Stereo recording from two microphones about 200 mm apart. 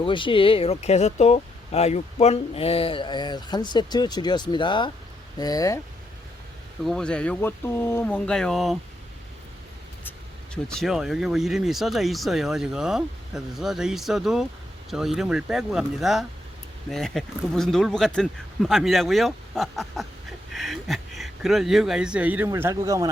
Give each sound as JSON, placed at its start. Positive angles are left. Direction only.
{"t": 0.0, "sound": "speech", "side_deg": 25}
{"t": 6.8, "sound": "speech", "side_deg": 5}
{"t": 10.1, "sound": "speech", "side_deg": 5}